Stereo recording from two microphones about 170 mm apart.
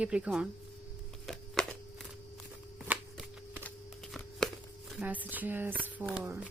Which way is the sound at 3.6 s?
5° left (ahead or behind).